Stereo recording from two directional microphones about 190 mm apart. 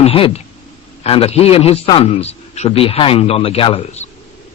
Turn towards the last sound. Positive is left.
turn(degrees=30)  # may be behind; listen again after turning